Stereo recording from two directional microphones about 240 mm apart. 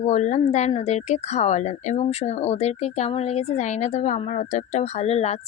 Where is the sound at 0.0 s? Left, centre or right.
Left.